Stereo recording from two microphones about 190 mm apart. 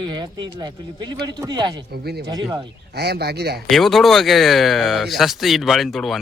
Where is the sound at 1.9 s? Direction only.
55° right (ahead or behind).